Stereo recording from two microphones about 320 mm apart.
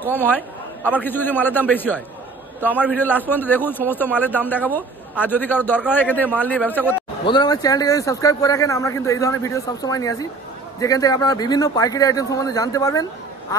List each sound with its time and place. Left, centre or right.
0.0 s a man's voice: centre